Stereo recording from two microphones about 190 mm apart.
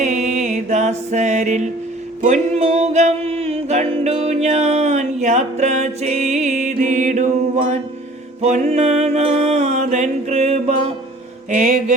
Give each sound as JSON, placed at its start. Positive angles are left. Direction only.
{"t": 0.0, "sound": "music", "side_deg": -35}